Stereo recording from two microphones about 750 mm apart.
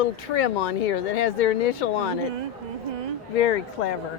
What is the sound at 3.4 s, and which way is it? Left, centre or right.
Speech, left.